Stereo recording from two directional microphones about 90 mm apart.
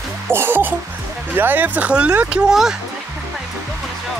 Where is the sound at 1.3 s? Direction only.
20° right (ahead or behind); by 2.7 s 5° right (ahead or behind).